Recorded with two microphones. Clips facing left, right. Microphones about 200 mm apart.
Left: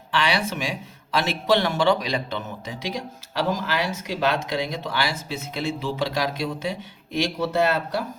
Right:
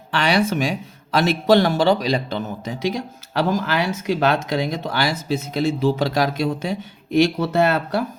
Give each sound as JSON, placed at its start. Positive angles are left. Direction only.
{"t": 0.1, "sound": "speech", "side_deg": -45}